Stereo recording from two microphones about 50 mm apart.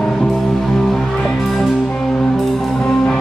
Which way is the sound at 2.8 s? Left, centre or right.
Centre.